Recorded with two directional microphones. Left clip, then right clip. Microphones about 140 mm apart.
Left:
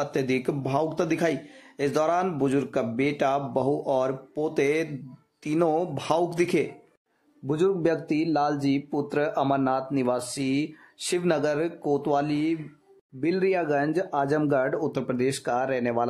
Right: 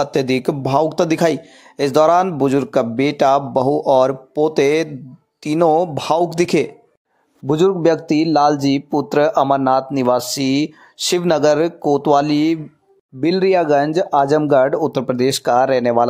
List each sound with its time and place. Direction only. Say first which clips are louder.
0.0 s speech: right 9 dB; 35° right (ahead or behind)